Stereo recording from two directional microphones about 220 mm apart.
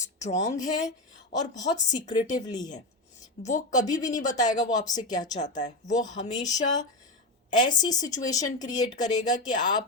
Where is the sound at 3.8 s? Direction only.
15° left (ahead or behind).